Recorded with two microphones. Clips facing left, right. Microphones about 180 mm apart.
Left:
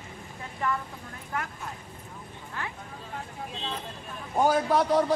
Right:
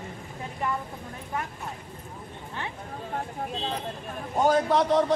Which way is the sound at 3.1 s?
40° right (ahead or behind).